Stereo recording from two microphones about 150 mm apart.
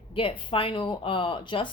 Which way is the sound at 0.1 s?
35° left (ahead or behind).